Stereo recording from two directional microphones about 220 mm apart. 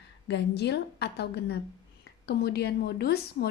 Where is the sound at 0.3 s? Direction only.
50° left (ahead or behind).